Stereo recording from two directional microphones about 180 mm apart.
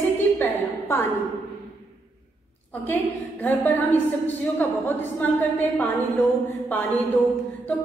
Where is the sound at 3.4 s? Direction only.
10° left (ahead or behind).